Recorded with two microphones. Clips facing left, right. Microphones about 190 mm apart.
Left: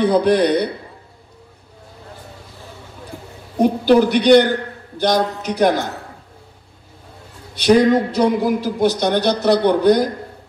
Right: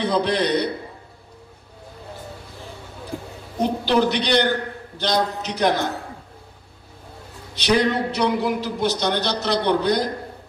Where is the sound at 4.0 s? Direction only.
10° left (ahead or behind).